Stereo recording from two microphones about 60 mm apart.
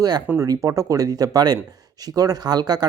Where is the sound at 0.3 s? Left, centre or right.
Right.